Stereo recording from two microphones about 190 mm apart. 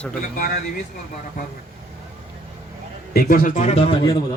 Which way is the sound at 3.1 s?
50° left (ahead or behind).